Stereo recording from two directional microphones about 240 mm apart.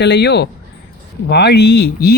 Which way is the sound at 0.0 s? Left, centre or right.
Left.